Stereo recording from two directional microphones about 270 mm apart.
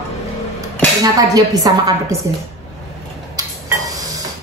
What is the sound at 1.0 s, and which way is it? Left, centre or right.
Speech, centre.